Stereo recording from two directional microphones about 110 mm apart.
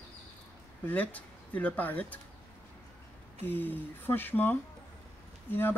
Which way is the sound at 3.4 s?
15° left (ahead or behind).